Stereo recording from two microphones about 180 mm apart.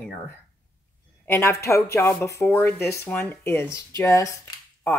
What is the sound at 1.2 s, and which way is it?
Speech, 15° left (ahead or behind).